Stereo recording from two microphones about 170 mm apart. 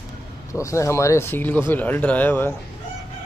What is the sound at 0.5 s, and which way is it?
Speech, 15° left (ahead or behind).